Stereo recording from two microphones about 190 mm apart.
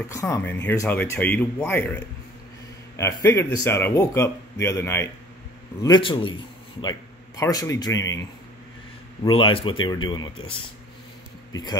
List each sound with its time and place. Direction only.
0.1 s a man's voice: 15° left (ahead or behind)
3.0 s a man's voice: 15° left (ahead or behind)
9.2 s speech: 30° left (ahead or behind)
11.5 s speech: 20° left (ahead or behind)